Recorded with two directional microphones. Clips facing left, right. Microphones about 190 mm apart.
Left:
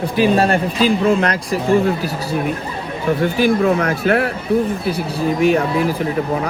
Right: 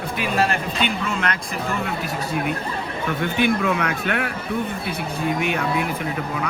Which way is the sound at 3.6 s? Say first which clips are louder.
Left 7 dB; 40° left (ahead or behind).